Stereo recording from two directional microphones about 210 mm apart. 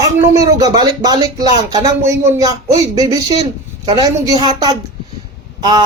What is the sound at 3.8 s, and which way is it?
Speech, 20° right (ahead or behind).